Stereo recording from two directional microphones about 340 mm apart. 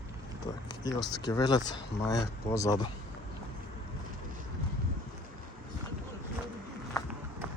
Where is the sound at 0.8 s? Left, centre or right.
Centre.